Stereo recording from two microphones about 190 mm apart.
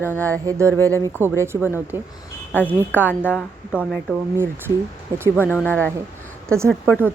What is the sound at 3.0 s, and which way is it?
Speech, 10° left (ahead or behind).